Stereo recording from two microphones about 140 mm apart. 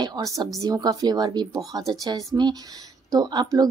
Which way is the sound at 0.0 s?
25° right (ahead or behind).